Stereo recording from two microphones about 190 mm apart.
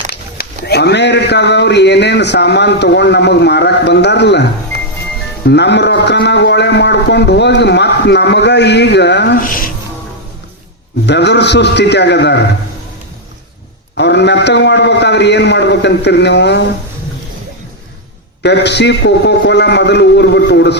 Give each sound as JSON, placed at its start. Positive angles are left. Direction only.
{"t": 0.1, "sound": "speech", "side_deg": 55}
{"t": 5.5, "sound": "speech", "side_deg": 65}
{"t": 11.0, "sound": "speech", "side_deg": 65}
{"t": 13.9, "sound": "speech", "side_deg": 65}
{"t": 18.4, "sound": "speech", "side_deg": 65}